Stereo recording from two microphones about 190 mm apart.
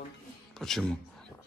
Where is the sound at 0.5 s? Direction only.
Centre (ahead or behind).